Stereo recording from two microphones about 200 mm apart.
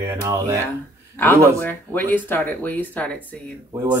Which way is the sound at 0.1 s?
15° right (ahead or behind).